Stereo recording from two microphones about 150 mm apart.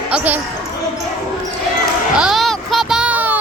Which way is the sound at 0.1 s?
10° right (ahead or behind).